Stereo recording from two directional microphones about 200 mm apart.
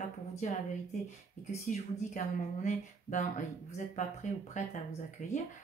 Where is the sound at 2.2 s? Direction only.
40° left (ahead or behind).